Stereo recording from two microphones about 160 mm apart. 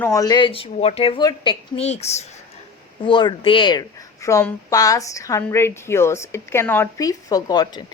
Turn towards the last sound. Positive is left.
turn(degrees=25)  # may be behind; listen again after turning